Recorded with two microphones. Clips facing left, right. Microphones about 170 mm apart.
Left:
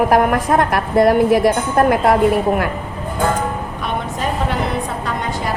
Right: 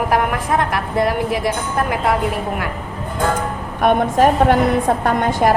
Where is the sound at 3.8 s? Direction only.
55° right (ahead or behind).